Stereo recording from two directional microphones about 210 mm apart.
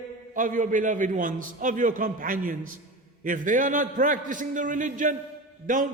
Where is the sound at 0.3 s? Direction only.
40° right (ahead or behind).